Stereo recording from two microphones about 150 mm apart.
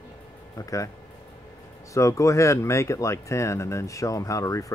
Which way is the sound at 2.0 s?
20° left (ahead or behind).